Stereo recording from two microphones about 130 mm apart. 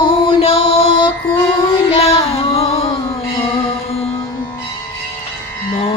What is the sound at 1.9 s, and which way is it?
Music, 50° left (ahead or behind).